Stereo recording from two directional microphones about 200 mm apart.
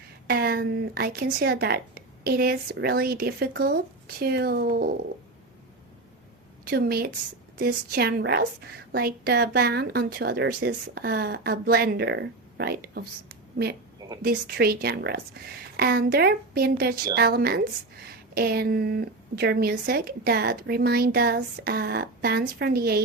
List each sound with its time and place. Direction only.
0.3 s a woman's voice: 50° right (ahead or behind)
6.7 s a woman's voice: 50° right (ahead or behind)